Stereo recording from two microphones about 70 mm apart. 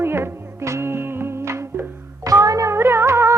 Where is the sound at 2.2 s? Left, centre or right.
Right.